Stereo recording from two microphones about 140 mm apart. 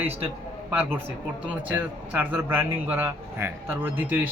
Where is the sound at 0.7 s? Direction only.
15° right (ahead or behind).